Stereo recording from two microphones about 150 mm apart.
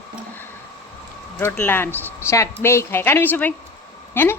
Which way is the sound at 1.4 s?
15° left (ahead or behind).